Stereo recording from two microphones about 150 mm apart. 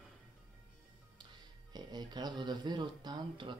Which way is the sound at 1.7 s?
30° right (ahead or behind).